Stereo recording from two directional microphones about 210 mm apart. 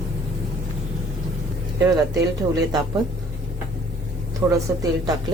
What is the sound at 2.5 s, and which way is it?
Speech, 20° right (ahead or behind).